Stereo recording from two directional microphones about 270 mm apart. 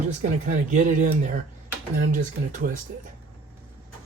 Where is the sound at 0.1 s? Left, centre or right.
Right.